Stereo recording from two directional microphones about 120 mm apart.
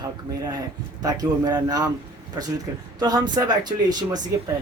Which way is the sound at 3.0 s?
35° right (ahead or behind).